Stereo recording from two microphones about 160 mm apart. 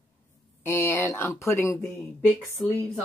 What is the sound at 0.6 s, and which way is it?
Speech, 15° left (ahead or behind).